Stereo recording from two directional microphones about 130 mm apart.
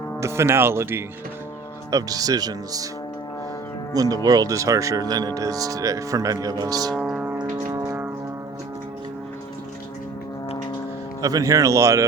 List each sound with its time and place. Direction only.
0.2 s speech: 20° right (ahead or behind)
3.9 s speech: 30° right (ahead or behind)
7.0 s music: 10° right (ahead or behind)
11.2 s speech: 25° right (ahead or behind)